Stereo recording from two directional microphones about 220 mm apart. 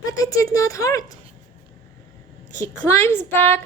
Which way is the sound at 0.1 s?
15° left (ahead or behind).